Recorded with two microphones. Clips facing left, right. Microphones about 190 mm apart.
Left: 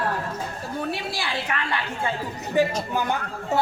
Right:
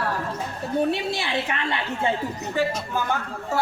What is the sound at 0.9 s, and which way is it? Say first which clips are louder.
A woman's voice: right 3 dB; 25° right (ahead or behind).